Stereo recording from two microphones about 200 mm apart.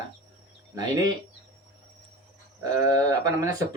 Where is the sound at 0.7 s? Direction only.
20° right (ahead or behind).